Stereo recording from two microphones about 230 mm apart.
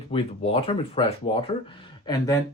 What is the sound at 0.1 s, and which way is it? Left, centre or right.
Speech, left.